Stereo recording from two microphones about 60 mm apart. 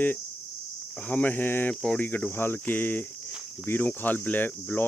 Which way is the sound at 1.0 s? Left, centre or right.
Left.